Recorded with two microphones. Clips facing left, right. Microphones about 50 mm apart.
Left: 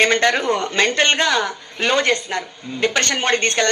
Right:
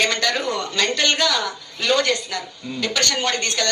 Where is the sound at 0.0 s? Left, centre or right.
Left.